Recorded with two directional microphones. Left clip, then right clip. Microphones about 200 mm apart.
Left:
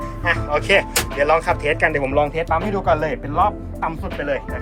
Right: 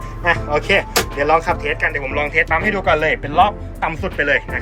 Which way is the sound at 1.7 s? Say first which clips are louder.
Left 2 dB; 15° left (ahead or behind).